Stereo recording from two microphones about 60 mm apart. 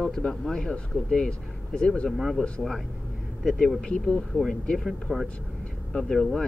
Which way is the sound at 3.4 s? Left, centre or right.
Centre.